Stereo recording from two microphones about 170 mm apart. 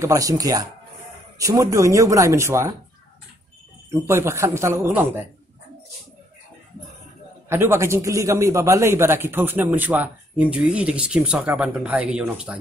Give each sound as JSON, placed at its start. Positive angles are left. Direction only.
{"t": 0.0, "sound": "a man's voice", "side_deg": -20}
{"t": 3.9, "sound": "a man's voice", "side_deg": -15}
{"t": 7.4, "sound": "a man's voice", "side_deg": -15}